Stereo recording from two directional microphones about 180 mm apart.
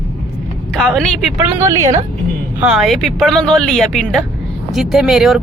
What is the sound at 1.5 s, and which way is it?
Speech, 15° right (ahead or behind).